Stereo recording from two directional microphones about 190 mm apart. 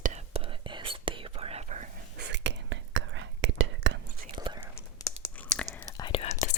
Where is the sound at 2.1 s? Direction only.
65° right (ahead or behind).